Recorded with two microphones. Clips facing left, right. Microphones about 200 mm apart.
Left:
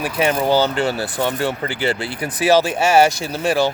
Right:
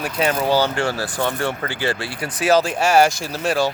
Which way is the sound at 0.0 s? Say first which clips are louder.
Left 2 dB; 10° left (ahead or behind).